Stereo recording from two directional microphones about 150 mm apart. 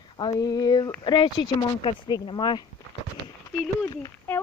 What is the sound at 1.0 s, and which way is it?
Speech, 30° left (ahead or behind).